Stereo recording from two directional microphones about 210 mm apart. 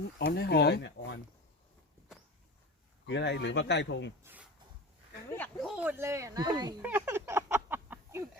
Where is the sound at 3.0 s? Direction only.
55° left (ahead or behind).